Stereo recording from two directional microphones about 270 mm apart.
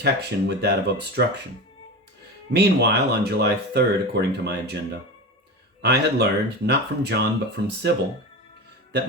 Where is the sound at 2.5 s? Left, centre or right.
Right.